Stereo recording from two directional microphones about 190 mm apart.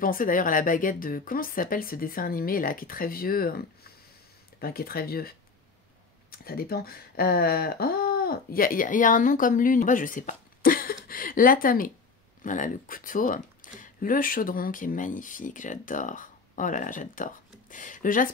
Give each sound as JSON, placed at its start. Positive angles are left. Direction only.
{"t": 0.0, "sound": "speech", "side_deg": 45}
{"t": 6.3, "sound": "speech", "side_deg": 50}